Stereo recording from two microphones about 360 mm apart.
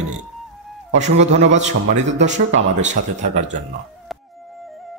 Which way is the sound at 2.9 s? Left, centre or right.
Centre.